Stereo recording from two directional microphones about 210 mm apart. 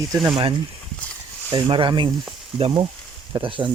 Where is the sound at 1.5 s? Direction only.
20° right (ahead or behind).